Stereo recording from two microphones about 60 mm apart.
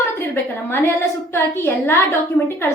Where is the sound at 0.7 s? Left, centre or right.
Left.